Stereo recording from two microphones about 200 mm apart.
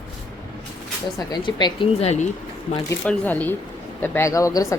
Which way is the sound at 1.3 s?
20° left (ahead or behind).